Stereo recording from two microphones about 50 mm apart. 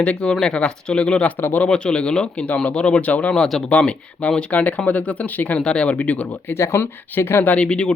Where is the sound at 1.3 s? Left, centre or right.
Left.